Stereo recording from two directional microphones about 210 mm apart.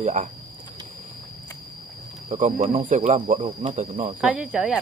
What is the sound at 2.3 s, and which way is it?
Speech, 35° right (ahead or behind).